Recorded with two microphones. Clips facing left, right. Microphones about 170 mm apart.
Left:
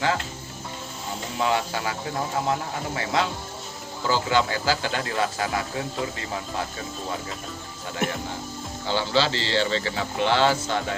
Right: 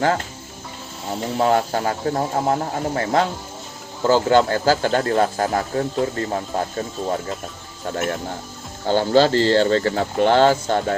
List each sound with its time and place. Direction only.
1.4 s speech: 45° right (ahead or behind)
8.9 s speech: 50° right (ahead or behind)